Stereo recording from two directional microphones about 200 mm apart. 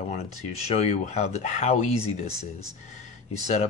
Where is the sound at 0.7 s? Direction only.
35° left (ahead or behind).